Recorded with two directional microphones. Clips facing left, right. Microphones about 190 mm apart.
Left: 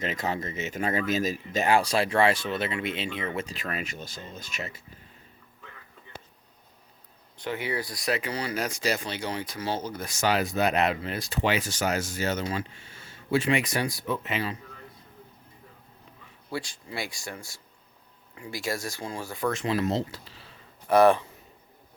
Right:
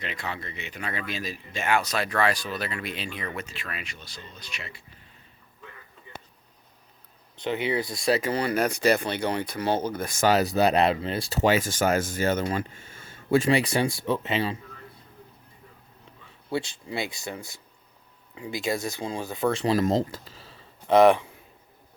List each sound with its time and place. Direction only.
0.0 s speech: 40° left (ahead or behind); by 3.5 s 25° left (ahead or behind)
3.5 s speech: 40° left (ahead or behind)
7.3 s speech: 20° right (ahead or behind)
8.2 s speech: 50° right (ahead or behind)
13.5 s speech: 30° right (ahead or behind)
16.5 s speech: 25° right (ahead or behind); by 20.6 s 40° right (ahead or behind)
20.8 s speech: 20° right (ahead or behind)